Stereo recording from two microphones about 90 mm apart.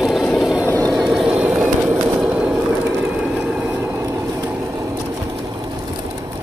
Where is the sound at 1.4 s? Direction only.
15° right (ahead or behind).